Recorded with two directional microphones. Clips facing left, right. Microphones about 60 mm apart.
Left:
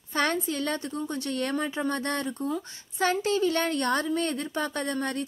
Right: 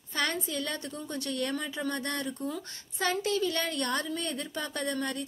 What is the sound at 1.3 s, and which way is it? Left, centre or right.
Speech, left.